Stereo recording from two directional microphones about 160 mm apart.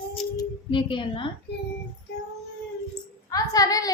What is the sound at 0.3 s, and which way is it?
Speech, 30° left (ahead or behind).